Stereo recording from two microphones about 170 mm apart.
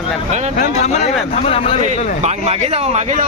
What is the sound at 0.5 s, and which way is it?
Speech, 40° left (ahead or behind).